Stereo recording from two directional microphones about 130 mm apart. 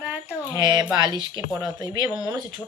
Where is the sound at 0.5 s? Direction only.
30° right (ahead or behind).